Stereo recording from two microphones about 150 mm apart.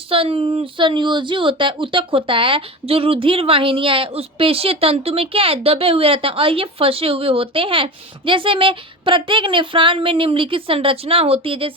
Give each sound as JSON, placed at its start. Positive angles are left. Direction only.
{"t": 0.1, "sound": "speech", "side_deg": -40}